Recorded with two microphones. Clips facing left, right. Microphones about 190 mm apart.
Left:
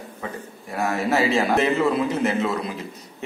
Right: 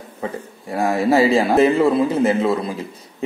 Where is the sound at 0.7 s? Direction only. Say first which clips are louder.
Right 6 dB; 30° right (ahead or behind).